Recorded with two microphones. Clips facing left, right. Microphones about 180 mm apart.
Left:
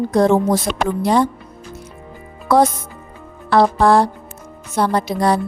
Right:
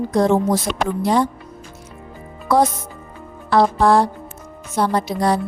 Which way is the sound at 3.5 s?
70° left (ahead or behind).